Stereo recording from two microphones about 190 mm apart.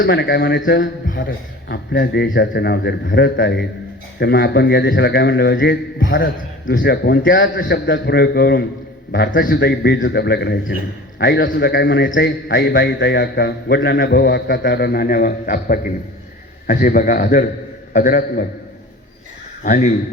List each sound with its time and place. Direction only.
0.0 s a man's voice: 65° left (ahead or behind)
7.3 s a man's voice: 75° left (ahead or behind)
7.6 s a man's voice: 50° left (ahead or behind); by 12.3 s 70° left (ahead or behind)
12.5 s a man's voice: 55° left (ahead or behind)
19.6 s a man's voice: 40° left (ahead or behind)